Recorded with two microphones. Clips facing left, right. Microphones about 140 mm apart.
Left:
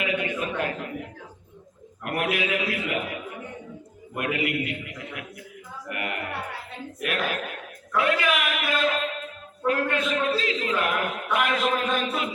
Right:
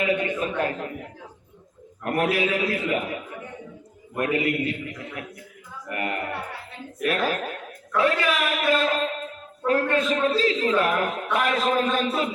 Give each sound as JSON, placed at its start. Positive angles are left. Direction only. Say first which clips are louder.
{"t": 0.0, "sound": "a sound", "louder": "right 3 dB", "side_deg": -35}
{"t": 2.0, "sound": "music", "louder": "right 3 dB", "side_deg": -35}
{"t": 4.2, "sound": "music", "louder": "right 3 dB", "side_deg": -35}